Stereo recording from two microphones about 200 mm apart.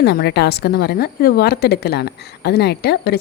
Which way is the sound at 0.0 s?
55° left (ahead or behind).